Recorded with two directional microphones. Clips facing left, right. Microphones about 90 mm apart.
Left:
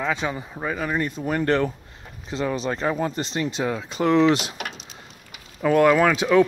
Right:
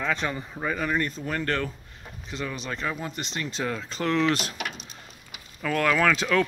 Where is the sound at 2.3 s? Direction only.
35° left (ahead or behind).